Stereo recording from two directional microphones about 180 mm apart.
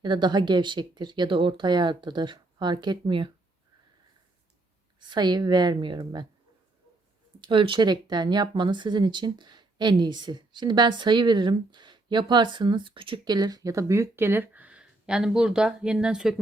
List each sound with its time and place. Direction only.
0.0 s speech: 25° right (ahead or behind)
4.9 s speech: 25° right (ahead or behind)
7.4 s speech: 30° right (ahead or behind); by 16.3 s 5° right (ahead or behind)